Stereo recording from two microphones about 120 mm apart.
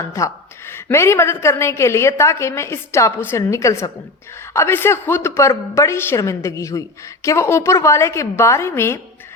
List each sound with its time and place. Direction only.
0.2 s a woman's voice: 25° left (ahead or behind)